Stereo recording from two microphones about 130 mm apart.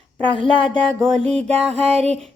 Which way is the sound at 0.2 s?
10° left (ahead or behind).